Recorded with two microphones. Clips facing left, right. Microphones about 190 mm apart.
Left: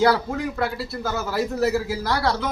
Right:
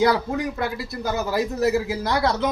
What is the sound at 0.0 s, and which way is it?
A man's voice, 20° right (ahead or behind).